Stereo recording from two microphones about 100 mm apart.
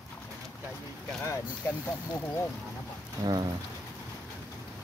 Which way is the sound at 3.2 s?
40° right (ahead or behind).